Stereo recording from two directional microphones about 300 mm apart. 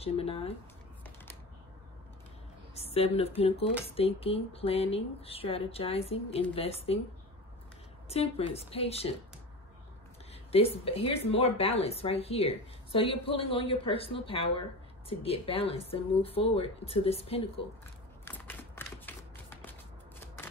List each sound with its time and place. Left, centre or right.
0.0 s speech: centre
2.7 s a woman's voice: centre
8.1 s speech: centre
10.5 s speech: centre
18.2 s typewriter: centre